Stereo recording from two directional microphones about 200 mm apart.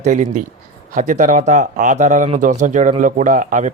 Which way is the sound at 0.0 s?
40° right (ahead or behind).